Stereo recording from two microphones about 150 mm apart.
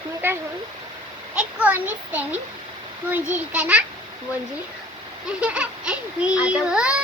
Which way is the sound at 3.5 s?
10° right (ahead or behind).